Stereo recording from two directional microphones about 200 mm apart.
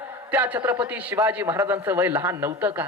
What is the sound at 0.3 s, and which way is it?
A man's voice, 10° right (ahead or behind).